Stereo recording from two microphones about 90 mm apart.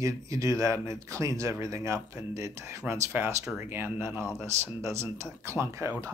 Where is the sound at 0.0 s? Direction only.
40° right (ahead or behind).